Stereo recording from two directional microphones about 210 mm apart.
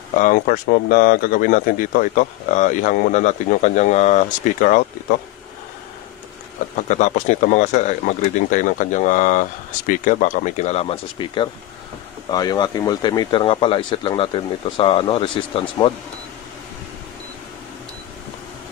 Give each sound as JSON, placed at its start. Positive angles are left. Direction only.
{"t": 0.2, "sound": "speech", "side_deg": 40}
{"t": 6.9, "sound": "speech", "side_deg": 35}